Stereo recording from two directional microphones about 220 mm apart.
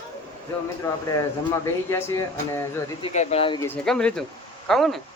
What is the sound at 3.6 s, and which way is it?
Speech, 5° left (ahead or behind).